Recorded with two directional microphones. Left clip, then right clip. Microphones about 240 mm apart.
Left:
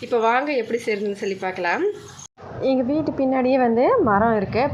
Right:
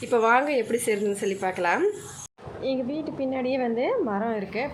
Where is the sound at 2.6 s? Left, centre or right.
Left.